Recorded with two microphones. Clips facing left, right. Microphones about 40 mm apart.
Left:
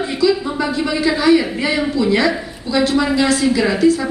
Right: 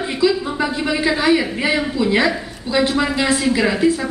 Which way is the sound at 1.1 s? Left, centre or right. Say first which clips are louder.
Left 3 dB; centre.